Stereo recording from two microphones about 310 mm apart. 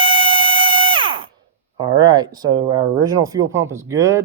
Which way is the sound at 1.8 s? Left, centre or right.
Centre.